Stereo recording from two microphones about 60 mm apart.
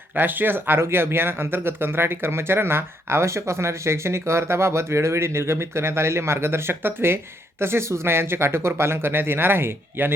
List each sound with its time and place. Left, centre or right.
0.2 s speech: right